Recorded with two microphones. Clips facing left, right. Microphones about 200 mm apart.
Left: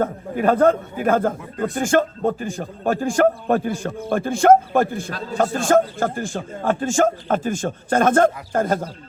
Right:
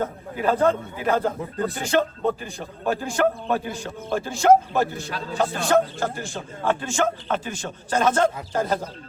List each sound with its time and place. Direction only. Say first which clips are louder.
0.0 s a man's voice: left 5 dB; 55° left (ahead or behind)